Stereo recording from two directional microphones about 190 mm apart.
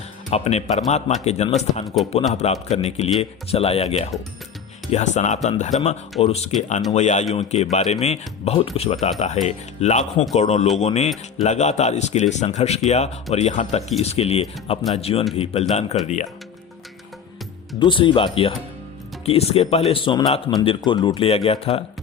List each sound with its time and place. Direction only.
0.3 s speech: 35° left (ahead or behind)
17.7 s speech: 25° left (ahead or behind)